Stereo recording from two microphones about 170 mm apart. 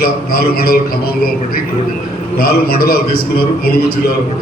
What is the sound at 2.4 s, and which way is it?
A man's voice, 60° left (ahead or behind).